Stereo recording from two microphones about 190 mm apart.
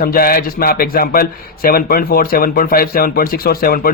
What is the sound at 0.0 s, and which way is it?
Speech, 50° left (ahead or behind).